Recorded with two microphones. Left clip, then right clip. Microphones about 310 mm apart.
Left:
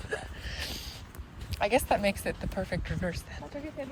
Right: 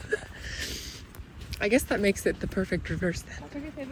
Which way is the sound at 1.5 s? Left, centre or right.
Centre.